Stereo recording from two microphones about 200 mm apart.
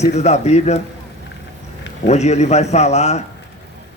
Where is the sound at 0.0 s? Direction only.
35° left (ahead or behind).